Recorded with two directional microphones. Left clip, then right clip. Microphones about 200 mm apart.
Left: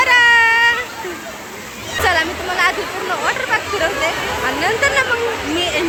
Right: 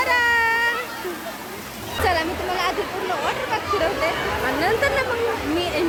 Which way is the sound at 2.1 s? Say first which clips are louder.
Left 5 dB; 5° right (ahead or behind).